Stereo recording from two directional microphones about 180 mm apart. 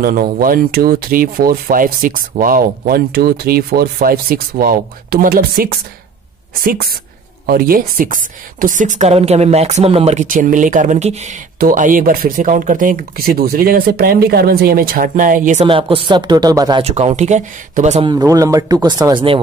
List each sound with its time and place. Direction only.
0.0 s speech: 50° right (ahead or behind)
15.6 s speech: 30° right (ahead or behind)
16.8 s speech: 35° right (ahead or behind)
18.0 s speech: 20° right (ahead or behind)